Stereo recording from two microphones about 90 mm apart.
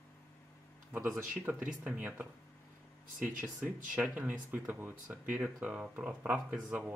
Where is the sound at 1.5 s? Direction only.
15° right (ahead or behind).